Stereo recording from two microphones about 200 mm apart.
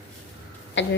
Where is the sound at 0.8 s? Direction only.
65° left (ahead or behind).